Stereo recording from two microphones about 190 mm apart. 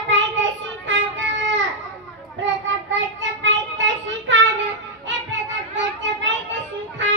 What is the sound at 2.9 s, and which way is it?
Child singing, 75° right (ahead or behind).